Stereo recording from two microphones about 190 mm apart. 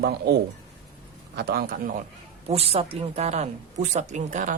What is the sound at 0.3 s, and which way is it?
Speech, 60° right (ahead or behind).